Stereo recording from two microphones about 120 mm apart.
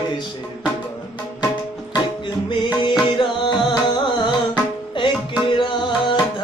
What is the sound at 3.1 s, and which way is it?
Music, 40° left (ahead or behind).